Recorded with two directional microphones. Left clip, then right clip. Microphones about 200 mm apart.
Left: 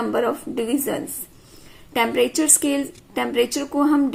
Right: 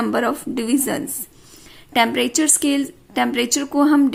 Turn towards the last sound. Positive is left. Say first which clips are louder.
# right 3 dB
turn(degrees=-25)  # may be behind; listen again after turning